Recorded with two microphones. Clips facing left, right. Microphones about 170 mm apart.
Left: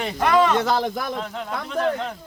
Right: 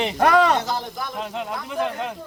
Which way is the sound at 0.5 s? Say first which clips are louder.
Left 4 dB; 65° left (ahead or behind).